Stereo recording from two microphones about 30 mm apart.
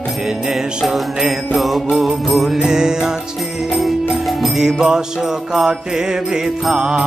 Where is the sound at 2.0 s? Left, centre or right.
Centre.